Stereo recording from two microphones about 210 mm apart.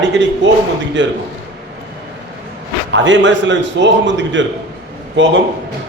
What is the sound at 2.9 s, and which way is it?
A man's voice, 60° right (ahead or behind).